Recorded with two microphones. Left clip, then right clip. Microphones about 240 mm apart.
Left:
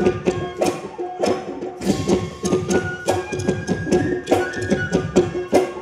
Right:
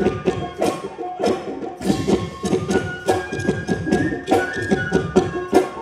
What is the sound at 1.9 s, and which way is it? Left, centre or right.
Music, left.